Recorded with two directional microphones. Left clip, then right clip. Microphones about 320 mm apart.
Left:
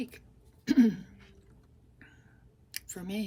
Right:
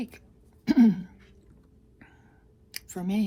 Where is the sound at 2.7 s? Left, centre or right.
Centre.